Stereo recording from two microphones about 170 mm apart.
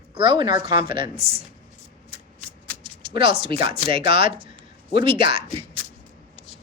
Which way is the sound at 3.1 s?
35° right (ahead or behind).